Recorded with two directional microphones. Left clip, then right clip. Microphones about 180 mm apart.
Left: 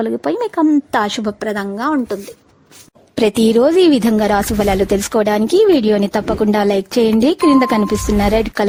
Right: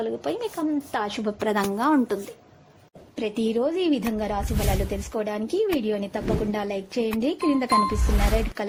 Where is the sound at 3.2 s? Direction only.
85° left.